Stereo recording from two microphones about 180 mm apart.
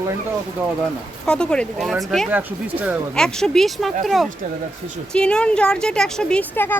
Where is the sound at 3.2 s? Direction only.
5° left (ahead or behind).